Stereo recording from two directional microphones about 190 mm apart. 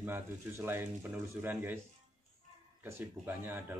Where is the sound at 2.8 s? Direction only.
10° right (ahead or behind).